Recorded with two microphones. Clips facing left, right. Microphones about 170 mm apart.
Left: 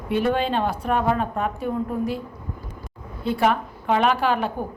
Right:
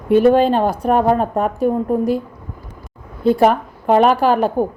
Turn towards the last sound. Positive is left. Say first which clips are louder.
# right 8 dB
turn(degrees=-40)  # may be behind; listen again after turning